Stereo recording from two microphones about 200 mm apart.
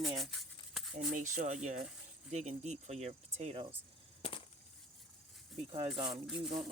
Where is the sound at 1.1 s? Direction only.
40° right (ahead or behind).